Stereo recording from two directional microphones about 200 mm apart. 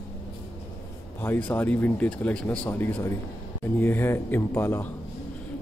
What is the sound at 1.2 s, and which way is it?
Speech, 10° left (ahead or behind).